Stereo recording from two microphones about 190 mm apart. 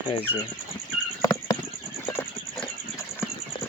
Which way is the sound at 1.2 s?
20° left (ahead or behind).